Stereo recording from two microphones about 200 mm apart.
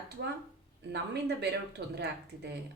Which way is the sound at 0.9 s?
55° right (ahead or behind).